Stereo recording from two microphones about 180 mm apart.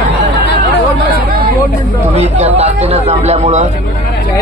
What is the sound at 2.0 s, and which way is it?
Speech, 35° right (ahead or behind).